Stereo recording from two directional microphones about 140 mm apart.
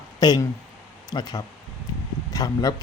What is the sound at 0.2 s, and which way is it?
Speech, 30° left (ahead or behind).